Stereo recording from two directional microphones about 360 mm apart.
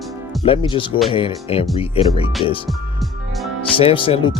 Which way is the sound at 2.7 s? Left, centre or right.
Centre.